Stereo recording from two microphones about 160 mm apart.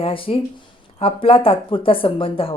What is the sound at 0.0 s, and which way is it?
A woman's voice, 35° left (ahead or behind).